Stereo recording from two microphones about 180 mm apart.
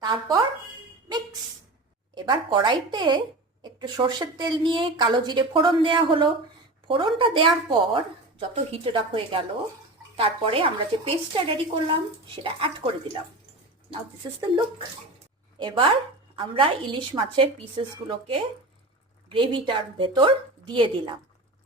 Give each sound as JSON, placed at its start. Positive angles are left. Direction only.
{"t": 0.0, "sound": "speech", "side_deg": -25}
{"t": 2.1, "sound": "a woman's voice", "side_deg": -25}
{"t": 15.5, "sound": "a woman's voice", "side_deg": -25}